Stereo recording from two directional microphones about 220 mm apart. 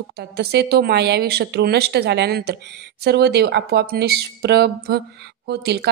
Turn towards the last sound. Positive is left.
turn(degrees=-50)  # may be behind; listen again after turning